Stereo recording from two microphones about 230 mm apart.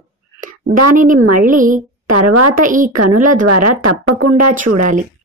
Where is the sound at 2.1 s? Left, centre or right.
Right.